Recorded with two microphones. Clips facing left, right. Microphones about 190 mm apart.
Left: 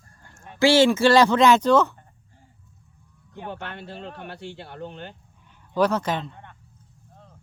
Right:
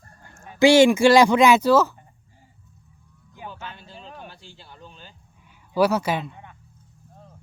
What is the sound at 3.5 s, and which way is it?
Speech, 65° left (ahead or behind).